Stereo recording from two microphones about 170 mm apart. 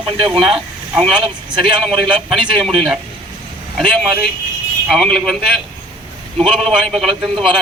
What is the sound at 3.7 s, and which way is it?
A man's voice, centre (ahead or behind).